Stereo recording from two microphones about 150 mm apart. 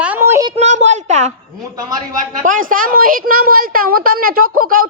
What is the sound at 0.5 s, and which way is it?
Speech, 50° right (ahead or behind).